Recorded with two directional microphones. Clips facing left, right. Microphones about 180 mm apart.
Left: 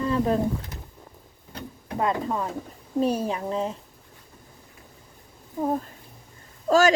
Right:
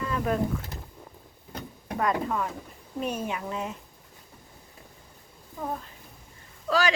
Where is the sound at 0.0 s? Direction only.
30° left (ahead or behind).